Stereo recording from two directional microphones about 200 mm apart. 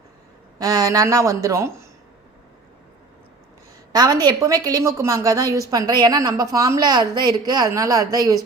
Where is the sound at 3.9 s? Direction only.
20° right (ahead or behind).